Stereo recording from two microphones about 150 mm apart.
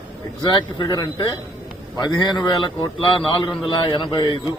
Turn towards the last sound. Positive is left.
turn(degrees=30)  # may be behind; listen again after turning